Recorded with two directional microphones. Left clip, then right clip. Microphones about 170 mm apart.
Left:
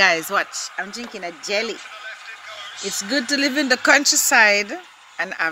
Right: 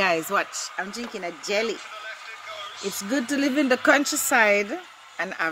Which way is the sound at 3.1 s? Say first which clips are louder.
Left 5 dB; 10° left (ahead or behind).